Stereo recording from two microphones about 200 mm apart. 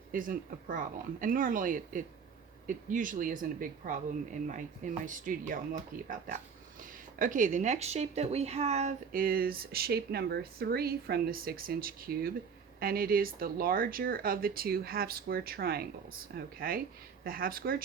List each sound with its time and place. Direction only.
0.1 s a woman's voice: 45° right (ahead or behind)